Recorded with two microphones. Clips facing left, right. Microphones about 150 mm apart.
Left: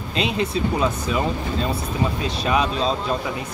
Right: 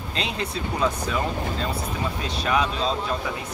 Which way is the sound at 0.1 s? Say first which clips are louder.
Left 6 dB; 15° left (ahead or behind).